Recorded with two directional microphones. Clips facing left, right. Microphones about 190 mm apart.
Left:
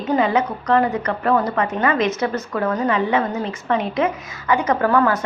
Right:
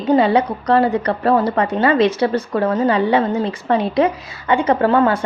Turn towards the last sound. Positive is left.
turn(degrees=-30)  # may be behind; listen again after turning